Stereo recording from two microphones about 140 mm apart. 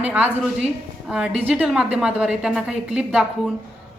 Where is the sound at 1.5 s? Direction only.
5° right (ahead or behind).